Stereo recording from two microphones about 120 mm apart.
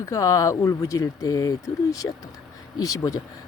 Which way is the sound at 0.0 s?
25° left (ahead or behind).